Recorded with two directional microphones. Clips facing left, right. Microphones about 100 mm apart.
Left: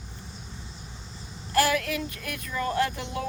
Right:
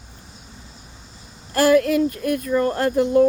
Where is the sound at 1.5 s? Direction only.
45° right (ahead or behind).